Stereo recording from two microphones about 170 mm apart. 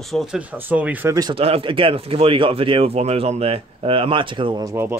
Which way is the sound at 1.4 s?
35° right (ahead or behind).